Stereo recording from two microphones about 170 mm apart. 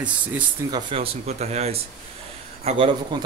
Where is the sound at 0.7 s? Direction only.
30° right (ahead or behind).